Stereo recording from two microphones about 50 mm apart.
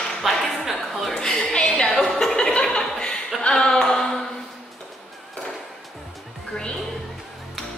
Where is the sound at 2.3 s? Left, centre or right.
Centre.